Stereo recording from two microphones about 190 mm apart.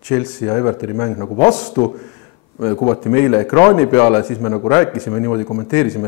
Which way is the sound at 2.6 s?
25° left (ahead or behind).